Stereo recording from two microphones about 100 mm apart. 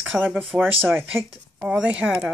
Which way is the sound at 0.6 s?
20° right (ahead or behind).